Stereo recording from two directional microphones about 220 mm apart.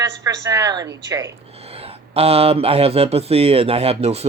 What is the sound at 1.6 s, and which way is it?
Speech, 25° right (ahead or behind).